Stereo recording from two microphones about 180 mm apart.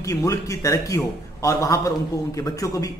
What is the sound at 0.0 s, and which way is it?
Speech, 20° left (ahead or behind).